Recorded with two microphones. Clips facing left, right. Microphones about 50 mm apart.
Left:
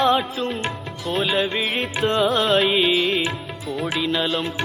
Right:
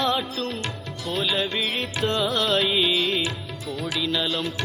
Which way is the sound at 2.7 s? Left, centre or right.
Left.